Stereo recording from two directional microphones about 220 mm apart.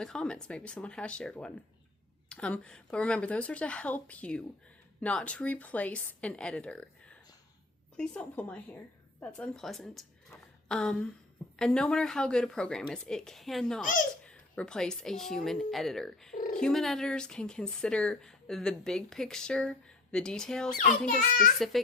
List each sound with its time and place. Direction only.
0.0 s a woman's voice: 5° left (ahead or behind)
16.3 s dog: 35° left (ahead or behind)
16.6 s speech: 5° left (ahead or behind)